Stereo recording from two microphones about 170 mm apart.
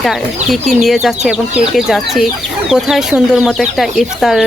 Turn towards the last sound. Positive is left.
turn(degrees=0)  # may be behind; listen again after turning